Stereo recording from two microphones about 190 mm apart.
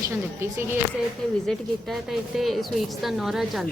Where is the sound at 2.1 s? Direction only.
Centre (ahead or behind).